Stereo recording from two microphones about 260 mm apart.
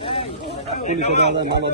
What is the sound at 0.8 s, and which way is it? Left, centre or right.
Speech, left.